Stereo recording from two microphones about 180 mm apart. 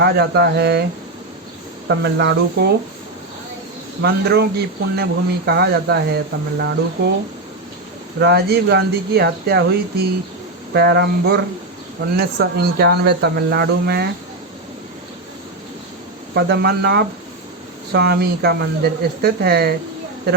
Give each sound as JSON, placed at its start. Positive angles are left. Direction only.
{"t": 0.0, "sound": "speech", "side_deg": -65}
{"t": 1.9, "sound": "speech", "side_deg": -70}
{"t": 4.0, "sound": "speech", "side_deg": -65}
{"t": 8.2, "sound": "speech", "side_deg": -65}
{"t": 10.8, "sound": "speech", "side_deg": -70}
{"t": 16.3, "sound": "speech", "side_deg": -65}